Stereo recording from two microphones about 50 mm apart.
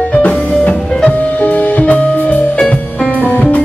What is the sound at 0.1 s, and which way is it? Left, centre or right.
Music, left.